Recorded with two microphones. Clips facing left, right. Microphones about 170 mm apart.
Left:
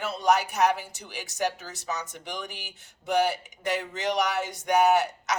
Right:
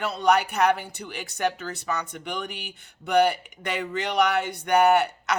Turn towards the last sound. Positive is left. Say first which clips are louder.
# right 2 dB
turn(degrees=-60)  # may be behind; listen again after turning